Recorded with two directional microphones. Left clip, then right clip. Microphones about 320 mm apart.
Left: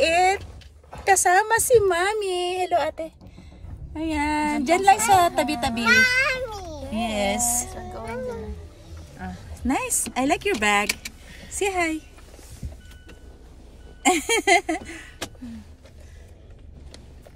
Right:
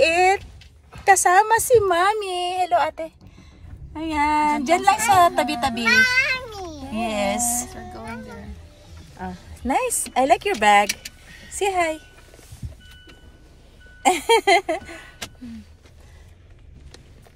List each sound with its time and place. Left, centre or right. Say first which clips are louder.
0.0 s vehicle: right 2 dB; centre
1.0 s a woman's voice: right 3 dB; centre
6.1 s a sound: right 1 dB; centre
6.7 s speech: right 4 dB; centre
9.2 s speech: right 1 dB; centre
10.9 s vehicle: left 1 dB; centre
11.5 s speech: right 3 dB; centre
14.0 s speech: right 3 dB; centre